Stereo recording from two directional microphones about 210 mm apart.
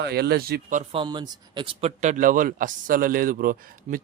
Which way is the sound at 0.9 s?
20° right (ahead or behind).